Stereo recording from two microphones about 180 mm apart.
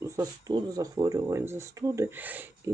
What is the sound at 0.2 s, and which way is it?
Speech, 20° right (ahead or behind).